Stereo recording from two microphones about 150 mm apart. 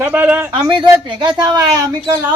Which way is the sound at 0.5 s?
35° right (ahead or behind).